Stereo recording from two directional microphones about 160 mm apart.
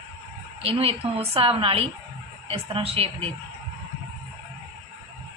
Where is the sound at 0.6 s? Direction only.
35° right (ahead or behind).